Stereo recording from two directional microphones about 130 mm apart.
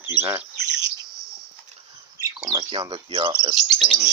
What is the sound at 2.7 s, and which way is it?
Bird, 40° right (ahead or behind).